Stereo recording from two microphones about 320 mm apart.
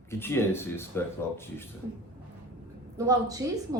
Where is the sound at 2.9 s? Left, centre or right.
Centre.